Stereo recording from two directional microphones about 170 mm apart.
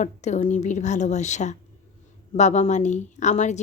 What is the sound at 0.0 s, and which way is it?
A woman's voice, 45° left (ahead or behind).